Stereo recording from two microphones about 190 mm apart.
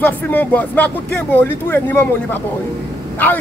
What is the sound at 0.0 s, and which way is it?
A man's voice, 10° left (ahead or behind).